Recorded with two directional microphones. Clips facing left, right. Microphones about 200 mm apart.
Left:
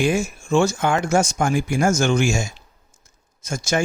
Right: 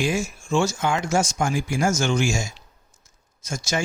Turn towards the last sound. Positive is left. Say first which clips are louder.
# left 4 dB
turn(degrees=55)  # may be behind; listen again after turning